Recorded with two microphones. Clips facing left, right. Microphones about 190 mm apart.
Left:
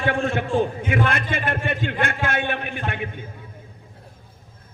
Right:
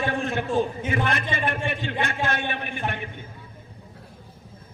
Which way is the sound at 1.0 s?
55° left (ahead or behind).